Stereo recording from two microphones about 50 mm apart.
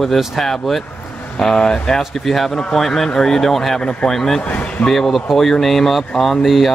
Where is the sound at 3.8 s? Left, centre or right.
Centre.